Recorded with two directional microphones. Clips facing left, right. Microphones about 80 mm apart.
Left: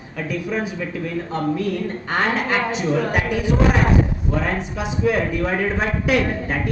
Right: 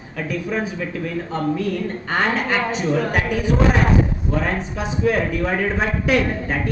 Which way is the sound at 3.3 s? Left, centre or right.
Right.